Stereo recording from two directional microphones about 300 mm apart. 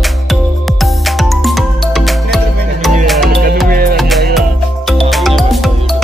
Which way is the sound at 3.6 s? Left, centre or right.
Right.